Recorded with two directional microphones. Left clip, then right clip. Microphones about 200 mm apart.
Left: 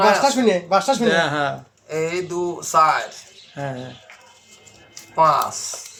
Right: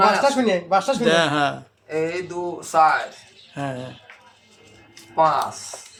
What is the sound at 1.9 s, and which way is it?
Speech, 10° left (ahead or behind).